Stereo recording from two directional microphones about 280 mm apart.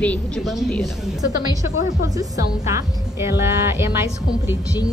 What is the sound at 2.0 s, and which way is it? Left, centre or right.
A woman's voice, centre.